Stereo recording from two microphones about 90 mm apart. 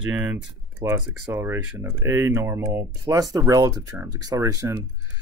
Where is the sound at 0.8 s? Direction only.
40° right (ahead or behind).